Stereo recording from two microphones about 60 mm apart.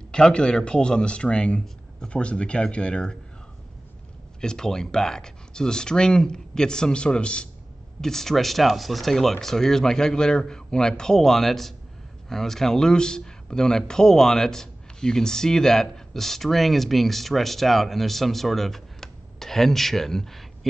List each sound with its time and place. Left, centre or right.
0.1 s speech: centre
4.4 s speech: centre
8.0 s speech: centre